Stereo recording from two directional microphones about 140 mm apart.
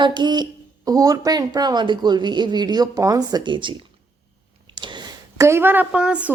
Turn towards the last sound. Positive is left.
turn(degrees=-10)  # may be behind; listen again after turning